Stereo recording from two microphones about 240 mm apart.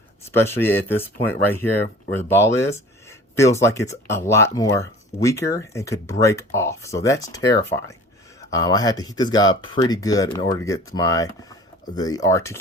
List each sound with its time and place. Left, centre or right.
0.3 s speech: centre